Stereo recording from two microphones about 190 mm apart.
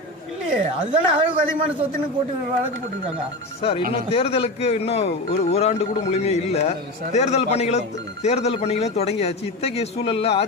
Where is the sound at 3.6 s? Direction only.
30° left (ahead or behind).